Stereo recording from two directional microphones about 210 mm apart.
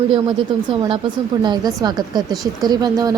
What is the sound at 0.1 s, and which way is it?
Speech, 25° right (ahead or behind).